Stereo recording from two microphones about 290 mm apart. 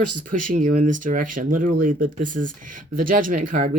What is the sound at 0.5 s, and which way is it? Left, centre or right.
Speech, right.